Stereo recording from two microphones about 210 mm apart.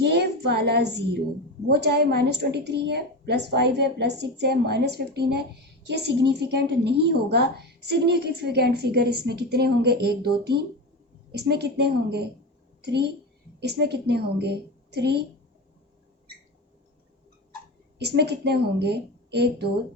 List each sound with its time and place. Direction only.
0.0 s child singing: 50° right (ahead or behind)
1.6 s a woman's voice: 50° right (ahead or behind)
18.0 s a woman's voice: 50° right (ahead or behind)